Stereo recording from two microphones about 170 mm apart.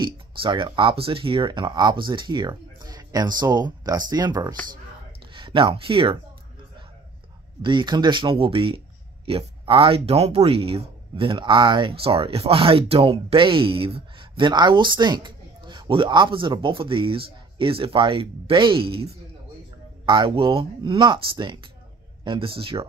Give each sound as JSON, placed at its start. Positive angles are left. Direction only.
{"t": 0.0, "sound": "speech", "side_deg": -30}
{"t": 7.6, "sound": "speech", "side_deg": -25}